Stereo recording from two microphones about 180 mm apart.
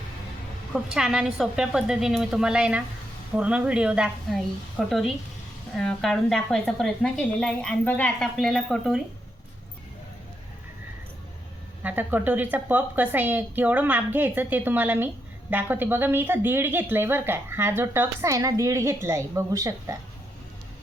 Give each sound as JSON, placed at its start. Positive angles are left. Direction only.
{"t": 0.7, "sound": "a woman's voice", "side_deg": -5}
{"t": 11.8, "sound": "a woman's voice", "side_deg": -10}